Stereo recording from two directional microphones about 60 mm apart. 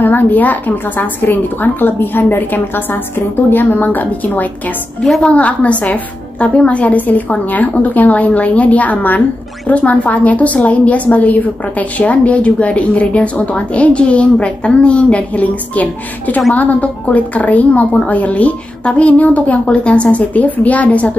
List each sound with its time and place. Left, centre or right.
0.0 s a woman's voice: left